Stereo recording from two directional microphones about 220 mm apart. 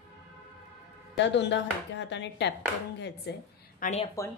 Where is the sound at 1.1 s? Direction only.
50° left (ahead or behind).